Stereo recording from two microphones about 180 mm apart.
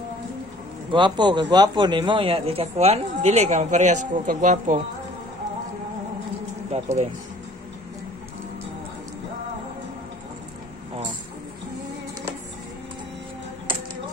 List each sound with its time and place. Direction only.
0.9 s a man's voice: 25° right (ahead or behind); by 4.8 s 45° right (ahead or behind)
6.7 s speech: 35° right (ahead or behind)